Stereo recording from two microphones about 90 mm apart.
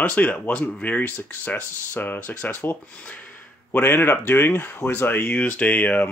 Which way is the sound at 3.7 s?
25° left (ahead or behind).